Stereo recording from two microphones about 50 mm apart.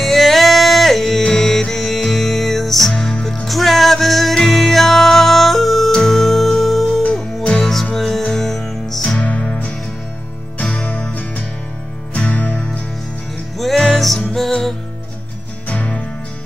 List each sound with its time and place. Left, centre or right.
0.0 s music: centre
7.4 s music: centre
7.7 s music: centre
9.2 s music: left
13.6 s music: centre
15.7 s music: left